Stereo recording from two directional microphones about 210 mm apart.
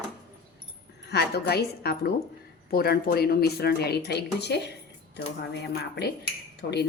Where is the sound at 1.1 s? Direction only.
50° left (ahead or behind).